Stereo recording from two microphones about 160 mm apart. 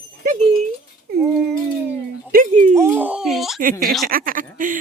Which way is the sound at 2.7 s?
15° right (ahead or behind).